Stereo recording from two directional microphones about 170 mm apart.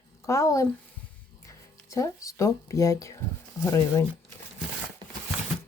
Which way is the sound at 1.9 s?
20° left (ahead or behind).